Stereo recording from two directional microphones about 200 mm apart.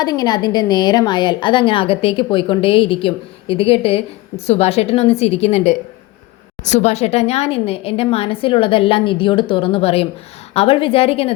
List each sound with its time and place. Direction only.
0.0 s a woman's voice: 20° left (ahead or behind)